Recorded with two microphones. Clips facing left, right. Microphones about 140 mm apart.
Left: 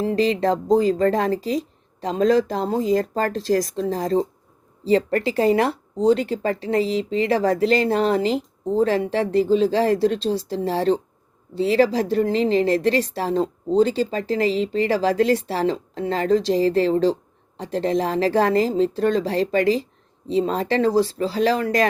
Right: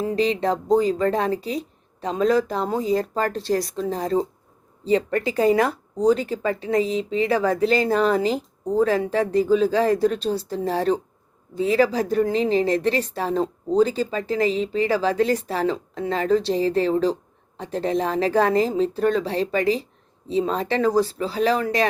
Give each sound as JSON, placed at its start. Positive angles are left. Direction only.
{"t": 0.2, "sound": "speech", "side_deg": 35}